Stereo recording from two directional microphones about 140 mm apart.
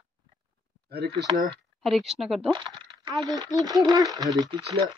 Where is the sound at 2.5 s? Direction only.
30° right (ahead or behind).